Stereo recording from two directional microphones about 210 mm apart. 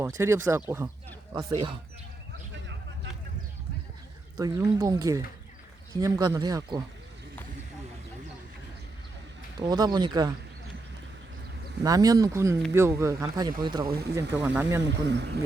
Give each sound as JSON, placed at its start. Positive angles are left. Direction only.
{"t": 0.0, "sound": "speech", "side_deg": -15}
{"t": 4.4, "sound": "speech", "side_deg": -15}
{"t": 9.6, "sound": "speech", "side_deg": -20}
{"t": 11.8, "sound": "speech", "side_deg": -15}
{"t": 13.8, "sound": "speech", "side_deg": -45}
{"t": 14.4, "sound": "speech", "side_deg": -10}
{"t": 14.8, "sound": "speech", "side_deg": -55}